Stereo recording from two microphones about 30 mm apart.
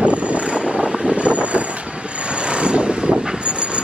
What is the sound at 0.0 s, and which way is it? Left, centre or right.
Vehicle, right.